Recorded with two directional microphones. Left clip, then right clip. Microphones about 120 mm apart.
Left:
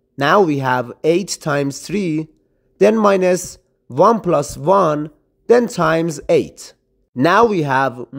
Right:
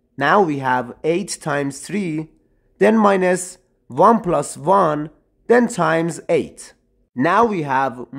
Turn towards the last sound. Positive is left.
turn(degrees=30)  # may be behind; listen again after turning